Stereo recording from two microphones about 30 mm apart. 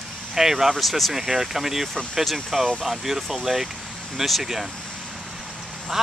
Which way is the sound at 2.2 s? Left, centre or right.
Centre.